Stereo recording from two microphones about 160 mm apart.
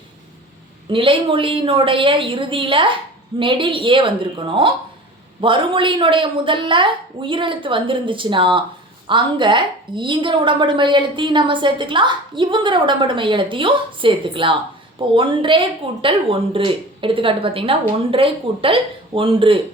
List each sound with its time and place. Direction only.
0.9 s a woman's voice: 35° right (ahead or behind)